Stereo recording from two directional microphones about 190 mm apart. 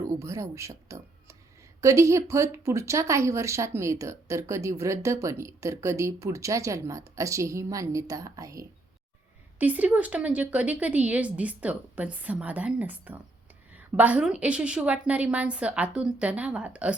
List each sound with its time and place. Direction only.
0.0 s speech: 15° right (ahead or behind)